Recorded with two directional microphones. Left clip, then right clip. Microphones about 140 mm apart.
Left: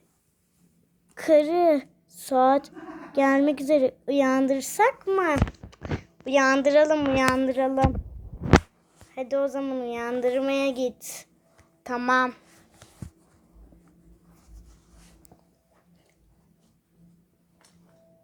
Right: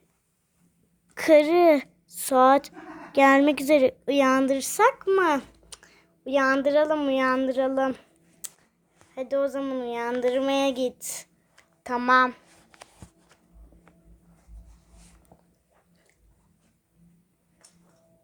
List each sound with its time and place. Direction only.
1.1 s a child's voice: 25° right (ahead or behind); by 7.8 s 10° right (ahead or behind)
9.1 s a woman's voice: 10° right (ahead or behind)